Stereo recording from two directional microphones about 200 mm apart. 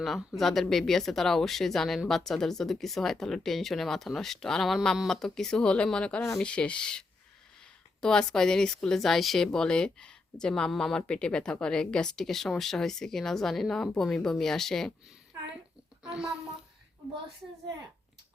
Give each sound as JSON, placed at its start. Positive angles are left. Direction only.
{"t": 0.0, "sound": "speech", "side_deg": 0}
{"t": 15.3, "sound": "a sound", "side_deg": -15}
{"t": 16.0, "sound": "speech", "side_deg": -5}